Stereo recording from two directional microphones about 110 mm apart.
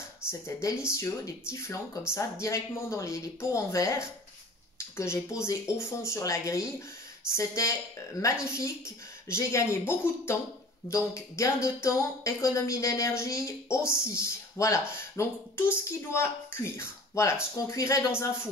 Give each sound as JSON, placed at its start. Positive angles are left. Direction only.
{"t": 0.3, "sound": "speech", "side_deg": 25}